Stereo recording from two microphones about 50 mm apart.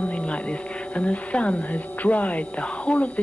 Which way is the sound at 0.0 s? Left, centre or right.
Left.